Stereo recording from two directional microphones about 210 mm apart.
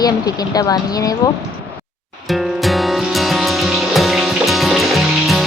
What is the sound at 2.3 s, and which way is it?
Music, centre (ahead or behind).